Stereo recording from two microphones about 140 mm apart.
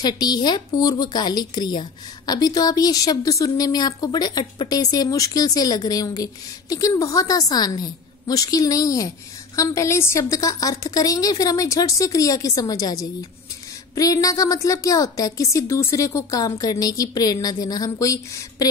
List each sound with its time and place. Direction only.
0.0 s speech: 30° left (ahead or behind)